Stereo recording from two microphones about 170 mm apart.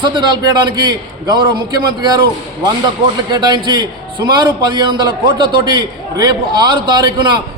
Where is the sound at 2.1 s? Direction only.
25° right (ahead or behind).